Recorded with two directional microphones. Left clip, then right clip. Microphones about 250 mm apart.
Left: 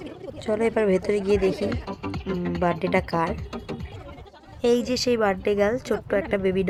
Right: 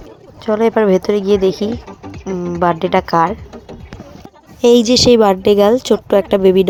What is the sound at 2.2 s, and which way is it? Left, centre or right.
Music, centre.